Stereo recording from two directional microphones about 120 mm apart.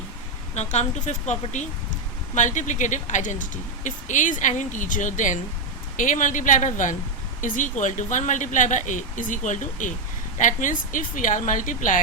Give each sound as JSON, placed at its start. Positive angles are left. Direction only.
{"t": 0.5, "sound": "speech", "side_deg": 70}